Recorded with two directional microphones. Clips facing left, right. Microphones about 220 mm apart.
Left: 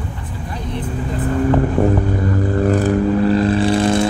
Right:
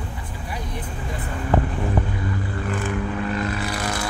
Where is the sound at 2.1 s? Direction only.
45° left (ahead or behind); by 4.0 s 30° left (ahead or behind).